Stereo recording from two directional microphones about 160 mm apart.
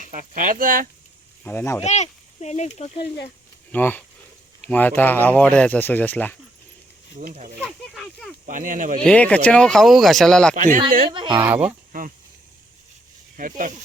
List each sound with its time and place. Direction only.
0.0 s speech: 55° right (ahead or behind)
1.5 s speech: 15° left (ahead or behind)
1.8 s speech: 45° left (ahead or behind)
3.7 s speech: 10° left (ahead or behind)
7.2 s speech: 55° right (ahead or behind)
7.6 s speech: centre (ahead or behind)
8.4 s speech: 55° right (ahead or behind)
9.0 s speech: 10° left (ahead or behind)
10.5 s speech: 55° right (ahead or behind)
11.1 s speech: 30° right (ahead or behind)
11.3 s speech: 10° right (ahead or behind)
11.9 s speech: 55° right (ahead or behind)
13.3 s speech: 55° right (ahead or behind)